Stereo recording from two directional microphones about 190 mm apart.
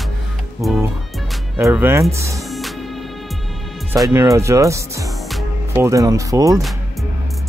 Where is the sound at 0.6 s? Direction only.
Centre (ahead or behind).